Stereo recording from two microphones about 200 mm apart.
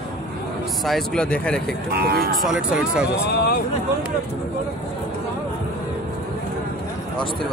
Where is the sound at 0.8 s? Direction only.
Centre (ahead or behind).